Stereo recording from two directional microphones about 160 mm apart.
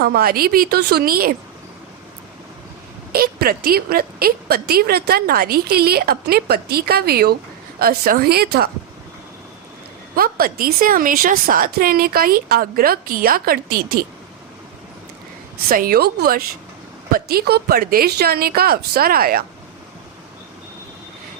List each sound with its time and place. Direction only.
0.0 s a woman's voice: 75° right (ahead or behind)
3.1 s a woman's voice: 70° right (ahead or behind)
10.2 s a woman's voice: 65° right (ahead or behind)
15.7 s a woman's voice: 65° right (ahead or behind)
17.1 s a woman's voice: 65° right (ahead or behind)